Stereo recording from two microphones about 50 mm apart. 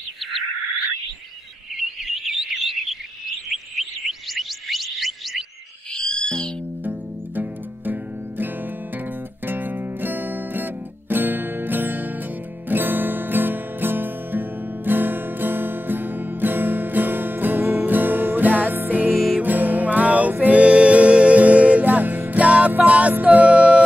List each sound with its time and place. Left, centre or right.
2.2 s a sound: centre
4.3 s music: centre
5.9 s music: centre
6.8 s music: right
9.5 s music: right
19.1 s music: centre
19.4 s music: right